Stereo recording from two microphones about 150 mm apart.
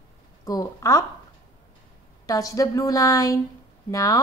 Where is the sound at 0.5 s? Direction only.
20° left (ahead or behind).